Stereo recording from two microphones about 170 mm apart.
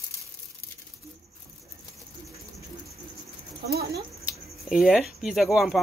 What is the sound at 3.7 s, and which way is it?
Speech, 65° right (ahead or behind).